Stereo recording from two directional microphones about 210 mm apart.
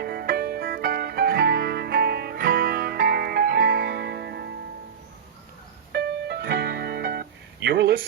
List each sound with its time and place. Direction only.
0.0 s music: 45° right (ahead or behind)
5.9 s music: 50° right (ahead or behind)